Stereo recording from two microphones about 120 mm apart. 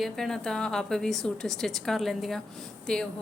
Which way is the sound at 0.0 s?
5° left (ahead or behind).